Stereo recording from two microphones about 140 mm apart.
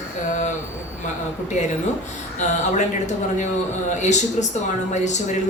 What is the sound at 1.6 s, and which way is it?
A man's voice, 60° left (ahead or behind).